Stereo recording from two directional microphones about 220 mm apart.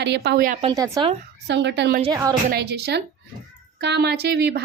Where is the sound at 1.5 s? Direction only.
50° right (ahead or behind).